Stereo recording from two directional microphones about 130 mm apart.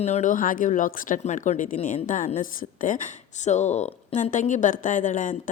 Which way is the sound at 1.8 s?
85° left.